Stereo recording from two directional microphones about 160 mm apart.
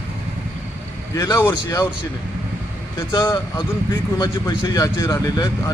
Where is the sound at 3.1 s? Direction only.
30° left (ahead or behind).